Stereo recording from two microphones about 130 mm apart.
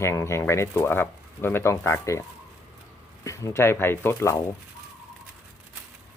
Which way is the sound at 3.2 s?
25° left (ahead or behind).